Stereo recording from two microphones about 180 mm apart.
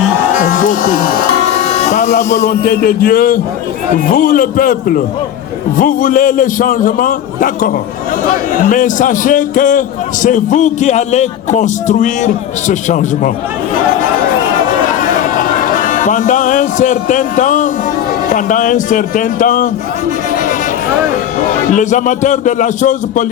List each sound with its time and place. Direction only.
0.3 s a sound: 50° left (ahead or behind)
1.7 s a man's voice: 40° left (ahead or behind)
15.7 s a man's voice: 45° left (ahead or behind)
21.7 s a man's voice: 45° left (ahead or behind)